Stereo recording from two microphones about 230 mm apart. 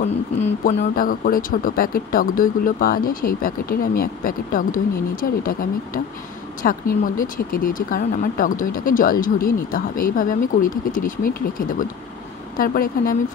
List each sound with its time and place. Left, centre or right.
0.0 s speech: left